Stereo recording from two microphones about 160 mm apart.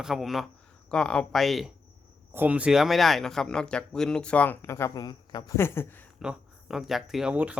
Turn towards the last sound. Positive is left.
turn(degrees=-5)  # may be behind; listen again after turning